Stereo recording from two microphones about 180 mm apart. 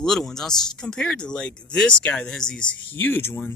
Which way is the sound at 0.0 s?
Centre (ahead or behind).